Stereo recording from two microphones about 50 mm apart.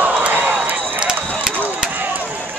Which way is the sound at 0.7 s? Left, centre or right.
Right.